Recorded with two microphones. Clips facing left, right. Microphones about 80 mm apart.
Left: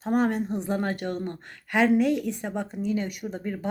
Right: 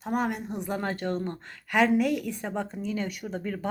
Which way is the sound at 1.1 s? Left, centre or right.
Right.